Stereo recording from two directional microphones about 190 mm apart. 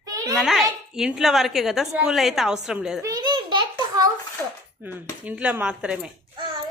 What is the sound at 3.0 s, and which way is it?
Babbling, 20° right (ahead or behind).